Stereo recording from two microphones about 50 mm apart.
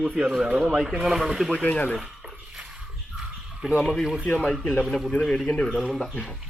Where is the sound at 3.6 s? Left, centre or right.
Centre.